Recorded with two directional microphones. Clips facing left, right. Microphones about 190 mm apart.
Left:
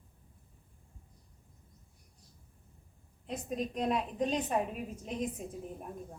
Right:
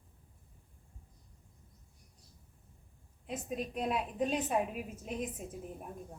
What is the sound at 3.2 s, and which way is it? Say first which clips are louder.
A woman's voice: left 2 dB; 5° right (ahead or behind).